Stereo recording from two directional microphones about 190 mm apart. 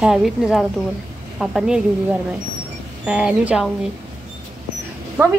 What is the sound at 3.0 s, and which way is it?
Speech, 5° right (ahead or behind).